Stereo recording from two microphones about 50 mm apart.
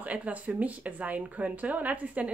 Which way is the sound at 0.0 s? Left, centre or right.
Right.